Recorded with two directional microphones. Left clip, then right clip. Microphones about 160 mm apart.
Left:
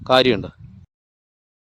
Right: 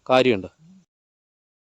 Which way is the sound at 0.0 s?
5° left (ahead or behind).